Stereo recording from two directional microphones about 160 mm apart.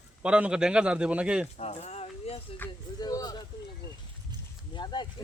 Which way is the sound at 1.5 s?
40° left (ahead or behind).